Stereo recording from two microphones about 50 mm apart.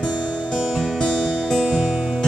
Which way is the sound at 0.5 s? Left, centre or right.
Centre.